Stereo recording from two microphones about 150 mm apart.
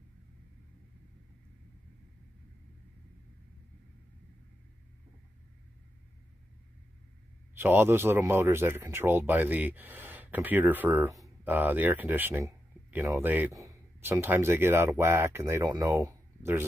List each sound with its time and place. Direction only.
7.5 s speech: 15° right (ahead or behind)